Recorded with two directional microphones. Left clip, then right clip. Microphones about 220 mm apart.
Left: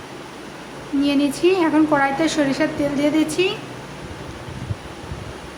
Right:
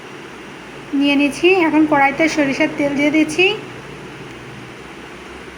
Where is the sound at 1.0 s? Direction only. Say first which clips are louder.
Right 4 dB; 35° left (ahead or behind).